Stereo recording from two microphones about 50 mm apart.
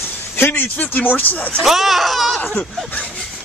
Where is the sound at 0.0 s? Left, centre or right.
Left.